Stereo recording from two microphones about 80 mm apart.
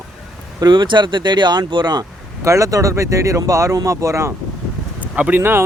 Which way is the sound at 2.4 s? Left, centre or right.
Right.